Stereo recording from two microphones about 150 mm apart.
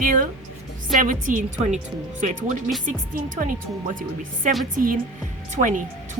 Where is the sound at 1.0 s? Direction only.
60° right (ahead or behind).